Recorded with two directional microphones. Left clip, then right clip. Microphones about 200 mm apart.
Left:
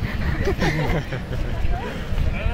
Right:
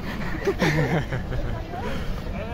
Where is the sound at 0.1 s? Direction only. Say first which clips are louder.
Even; 25° right (ahead or behind).